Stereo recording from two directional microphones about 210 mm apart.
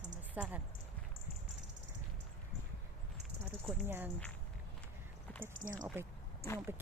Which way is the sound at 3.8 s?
10° right (ahead or behind).